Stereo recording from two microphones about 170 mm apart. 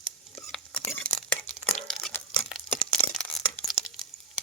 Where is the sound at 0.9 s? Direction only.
15° left (ahead or behind).